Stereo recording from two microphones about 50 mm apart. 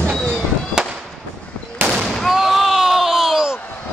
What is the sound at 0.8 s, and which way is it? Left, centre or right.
Fireworks, centre.